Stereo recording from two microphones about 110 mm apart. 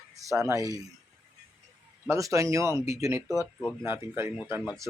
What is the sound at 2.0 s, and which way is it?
Speech, 30° right (ahead or behind).